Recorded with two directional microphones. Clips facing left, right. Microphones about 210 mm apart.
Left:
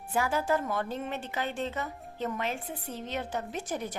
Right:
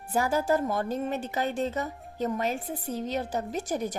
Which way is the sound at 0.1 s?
40° right (ahead or behind).